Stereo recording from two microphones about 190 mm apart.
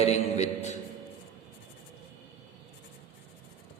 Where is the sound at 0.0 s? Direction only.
35° left (ahead or behind).